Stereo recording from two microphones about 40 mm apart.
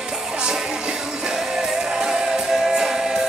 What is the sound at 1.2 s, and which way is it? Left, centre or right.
Music, centre.